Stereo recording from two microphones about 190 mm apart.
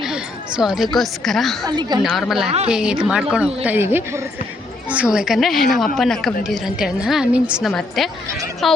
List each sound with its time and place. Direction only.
0.0 s a sound: 5° right (ahead or behind)
0.9 s a woman's voice: centre (ahead or behind)
1.6 s a woman's voice: 20° right (ahead or behind)
2.0 s a woman's voice: centre (ahead or behind)